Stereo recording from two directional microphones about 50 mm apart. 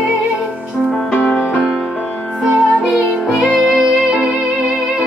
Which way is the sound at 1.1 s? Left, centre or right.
Left.